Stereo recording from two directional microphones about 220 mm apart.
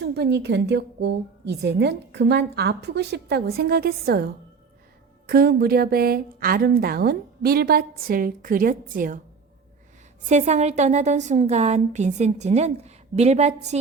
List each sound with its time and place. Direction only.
0.0 s a woman's voice: 50° right (ahead or behind)
10.2 s a woman's voice: 30° right (ahead or behind)